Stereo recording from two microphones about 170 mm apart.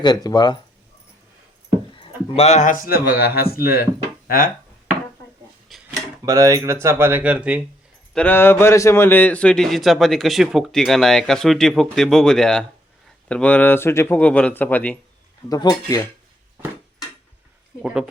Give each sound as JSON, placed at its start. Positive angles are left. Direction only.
{"t": 0.0, "sound": "speech", "side_deg": 25}
{"t": 1.9, "sound": "speech", "side_deg": 35}
{"t": 5.7, "sound": "dishes", "side_deg": 0}
{"t": 6.2, "sound": "speech", "side_deg": -20}
{"t": 8.1, "sound": "a man's voice", "side_deg": 10}
{"t": 15.4, "sound": "speech", "side_deg": 20}
{"t": 17.8, "sound": "a man's voice", "side_deg": -5}